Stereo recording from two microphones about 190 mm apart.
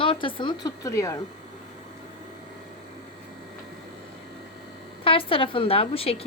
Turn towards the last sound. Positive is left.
turn(degrees=30)  # may be behind; listen again after turning